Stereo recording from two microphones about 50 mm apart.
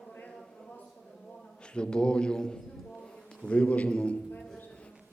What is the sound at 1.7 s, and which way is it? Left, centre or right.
Speech, centre.